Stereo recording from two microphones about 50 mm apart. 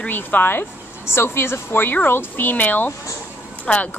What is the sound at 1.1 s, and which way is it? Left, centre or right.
A woman's voice, left.